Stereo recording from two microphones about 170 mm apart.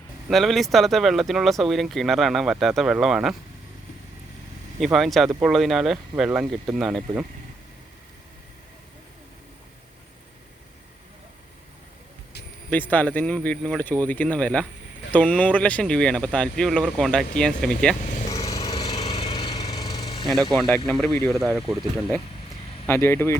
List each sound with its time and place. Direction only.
0.3 s speech: centre (ahead or behind)
4.8 s speech: centre (ahead or behind)
12.7 s speech: 10° left (ahead or behind)
18.3 s a sound: 20° left (ahead or behind)
20.2 s speech: centre (ahead or behind)
22.9 s speech: 15° left (ahead or behind)